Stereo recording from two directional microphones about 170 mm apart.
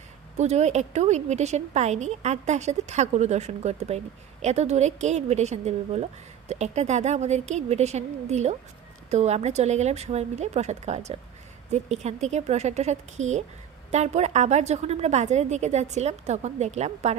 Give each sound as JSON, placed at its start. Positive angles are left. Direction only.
{"t": 0.4, "sound": "a woman's voice", "side_deg": -40}